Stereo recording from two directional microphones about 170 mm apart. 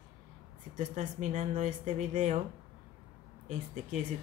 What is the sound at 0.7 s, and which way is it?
Speech, 50° right (ahead or behind).